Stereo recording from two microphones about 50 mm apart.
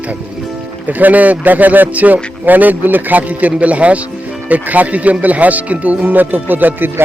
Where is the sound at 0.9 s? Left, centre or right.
Right.